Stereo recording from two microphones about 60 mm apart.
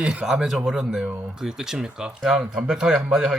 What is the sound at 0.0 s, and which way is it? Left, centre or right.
Speech, centre.